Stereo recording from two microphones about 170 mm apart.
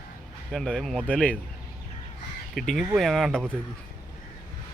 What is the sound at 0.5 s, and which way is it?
Speech, centre (ahead or behind).